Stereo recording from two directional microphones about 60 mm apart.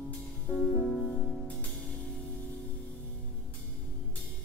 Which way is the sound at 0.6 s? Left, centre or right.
Centre.